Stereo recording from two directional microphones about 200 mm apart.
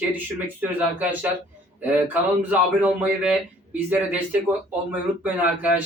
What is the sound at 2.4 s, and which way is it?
A man's voice, 5° right (ahead or behind).